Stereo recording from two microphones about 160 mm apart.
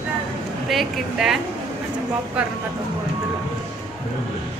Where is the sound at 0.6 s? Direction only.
Centre (ahead or behind).